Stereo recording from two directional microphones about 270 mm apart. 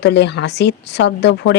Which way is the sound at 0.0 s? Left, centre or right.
Left.